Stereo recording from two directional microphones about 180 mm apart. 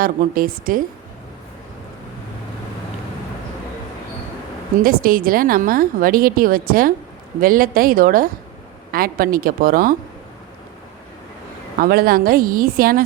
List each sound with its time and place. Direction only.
0.0 s a woman's voice: 55° right (ahead or behind)
4.8 s a woman's voice: 55° right (ahead or behind)
11.8 s a woman's voice: 55° right (ahead or behind)